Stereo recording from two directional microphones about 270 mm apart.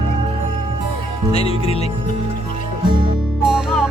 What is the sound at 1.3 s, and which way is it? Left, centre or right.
Music, left.